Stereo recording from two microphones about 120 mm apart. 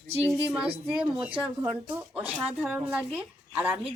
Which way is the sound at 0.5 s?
5° right (ahead or behind).